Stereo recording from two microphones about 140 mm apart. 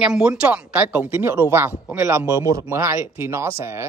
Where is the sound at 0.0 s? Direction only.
5° right (ahead or behind).